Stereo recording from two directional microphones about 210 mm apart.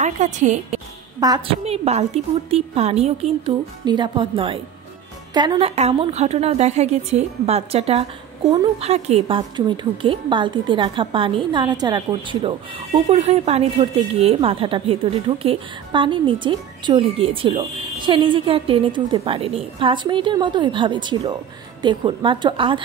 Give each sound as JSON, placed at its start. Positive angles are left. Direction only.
{"t": 0.0, "sound": "a woman's voice", "side_deg": -35}